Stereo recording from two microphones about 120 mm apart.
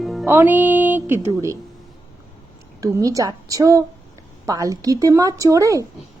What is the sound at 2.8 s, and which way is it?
Speech, 30° right (ahead or behind).